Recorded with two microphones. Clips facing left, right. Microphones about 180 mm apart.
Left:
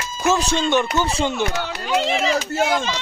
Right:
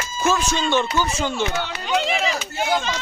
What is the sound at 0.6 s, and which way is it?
Speech, 20° left (ahead or behind).